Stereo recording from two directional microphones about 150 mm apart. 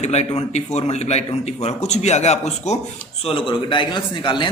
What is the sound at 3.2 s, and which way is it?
A man's voice, 35° left (ahead or behind).